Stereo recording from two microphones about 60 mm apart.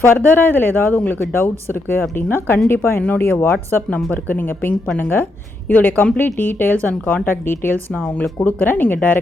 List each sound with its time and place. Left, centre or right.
0.0 s speech: left
3.8 s speech: left